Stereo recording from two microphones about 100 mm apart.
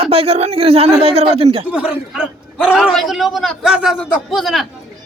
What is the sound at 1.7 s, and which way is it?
A man's voice, 10° right (ahead or behind).